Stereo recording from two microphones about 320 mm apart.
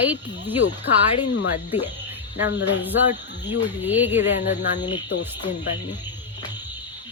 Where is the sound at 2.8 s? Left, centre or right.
Centre.